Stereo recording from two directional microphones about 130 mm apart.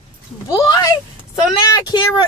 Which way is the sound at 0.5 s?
35° left (ahead or behind).